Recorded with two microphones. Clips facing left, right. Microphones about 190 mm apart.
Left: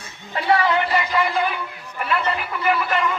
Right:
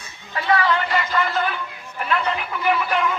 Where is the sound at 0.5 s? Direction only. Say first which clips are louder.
Left 1 dB; 25° left (ahead or behind).